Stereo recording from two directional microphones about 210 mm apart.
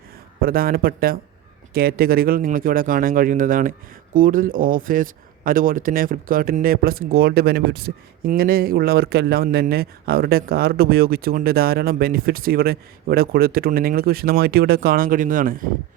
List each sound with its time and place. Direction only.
0.4 s speech: 45° right (ahead or behind)